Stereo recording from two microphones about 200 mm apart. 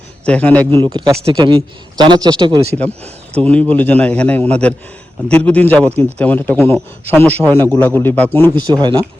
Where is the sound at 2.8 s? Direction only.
5° left (ahead or behind).